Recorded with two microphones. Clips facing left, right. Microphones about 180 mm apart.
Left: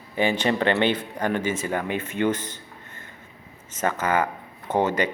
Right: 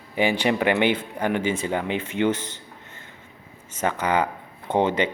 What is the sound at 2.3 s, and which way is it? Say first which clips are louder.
Speech: right 1 dB; 10° left (ahead or behind).